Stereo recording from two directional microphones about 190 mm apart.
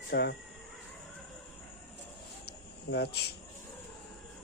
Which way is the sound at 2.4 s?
60° left (ahead or behind).